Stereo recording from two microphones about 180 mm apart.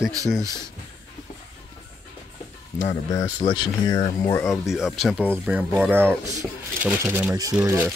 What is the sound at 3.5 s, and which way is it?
Speech, 25° left (ahead or behind).